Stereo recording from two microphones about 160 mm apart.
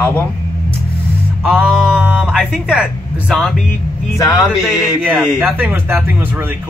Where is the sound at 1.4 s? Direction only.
5° right (ahead or behind).